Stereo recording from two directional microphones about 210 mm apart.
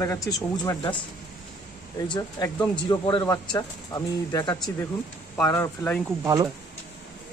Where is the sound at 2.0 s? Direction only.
20° left (ahead or behind).